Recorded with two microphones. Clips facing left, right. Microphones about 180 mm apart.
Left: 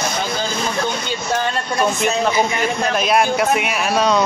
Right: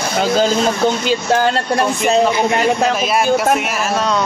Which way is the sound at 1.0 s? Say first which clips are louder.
Right 6 dB; 90° right.